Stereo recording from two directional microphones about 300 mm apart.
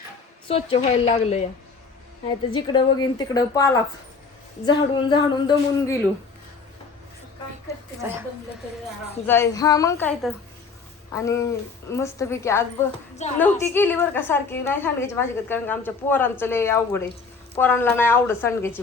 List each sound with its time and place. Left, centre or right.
0.4 s a woman's voice: centre
2.5 s a woman's voice: centre
8.0 s speech: centre
9.2 s a woman's voice: centre